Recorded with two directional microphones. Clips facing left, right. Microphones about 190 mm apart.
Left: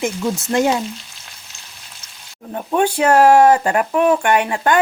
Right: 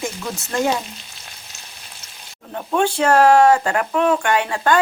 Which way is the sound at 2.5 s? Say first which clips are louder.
Left 2 dB; 15° left (ahead or behind).